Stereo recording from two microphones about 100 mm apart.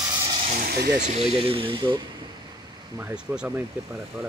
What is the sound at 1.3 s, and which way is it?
Speech, 65° right (ahead or behind).